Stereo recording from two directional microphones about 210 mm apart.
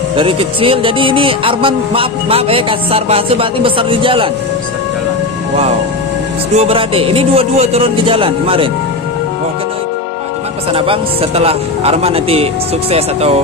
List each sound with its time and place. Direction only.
0.1 s music: 25° right (ahead or behind)
6.5 s music: 30° right (ahead or behind)
10.7 s music: 25° right (ahead or behind)